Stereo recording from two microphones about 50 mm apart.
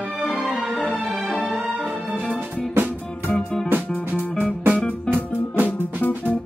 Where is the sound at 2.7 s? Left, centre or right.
Right.